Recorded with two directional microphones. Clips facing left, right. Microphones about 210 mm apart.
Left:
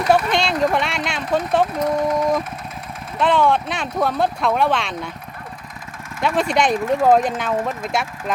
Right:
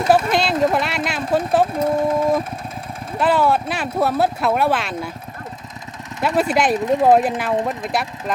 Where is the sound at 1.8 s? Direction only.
25° right (ahead or behind).